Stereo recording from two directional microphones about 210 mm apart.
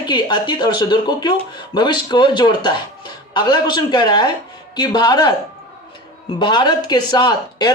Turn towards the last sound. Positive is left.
turn(degrees=20)  # may be behind; listen again after turning